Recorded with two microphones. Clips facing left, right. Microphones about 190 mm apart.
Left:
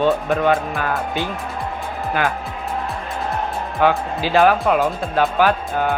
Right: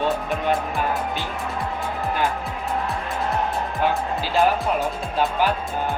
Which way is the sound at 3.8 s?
75° left (ahead or behind).